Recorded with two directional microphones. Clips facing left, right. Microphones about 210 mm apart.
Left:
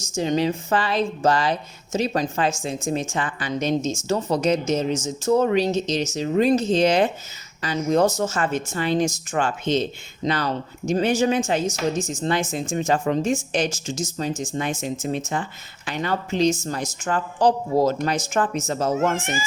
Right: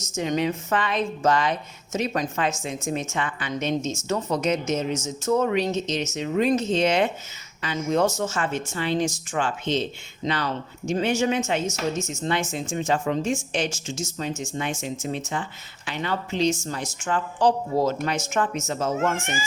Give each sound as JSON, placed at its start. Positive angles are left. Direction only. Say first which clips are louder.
{"t": 0.2, "sound": "speech", "louder": "left 3 dB", "side_deg": 35}
{"t": 15.9, "sound": "speech", "louder": "left 3 dB", "side_deg": 45}